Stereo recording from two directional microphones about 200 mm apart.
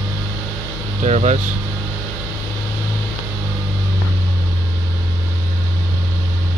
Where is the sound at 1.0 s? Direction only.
35° right (ahead or behind).